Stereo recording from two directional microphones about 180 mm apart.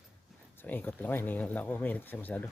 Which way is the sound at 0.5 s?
10° left (ahead or behind).